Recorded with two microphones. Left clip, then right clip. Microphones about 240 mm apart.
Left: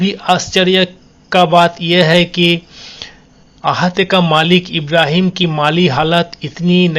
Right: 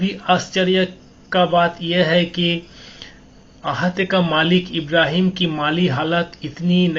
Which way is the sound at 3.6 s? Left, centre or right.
Left.